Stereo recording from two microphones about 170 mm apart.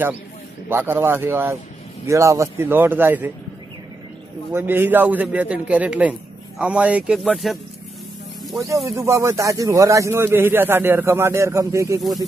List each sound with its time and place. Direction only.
0.7 s speech: 10° right (ahead or behind)
4.6 s speech: 10° right (ahead or behind)
8.6 s speech: 20° right (ahead or behind)
12.0 s speech: centre (ahead or behind)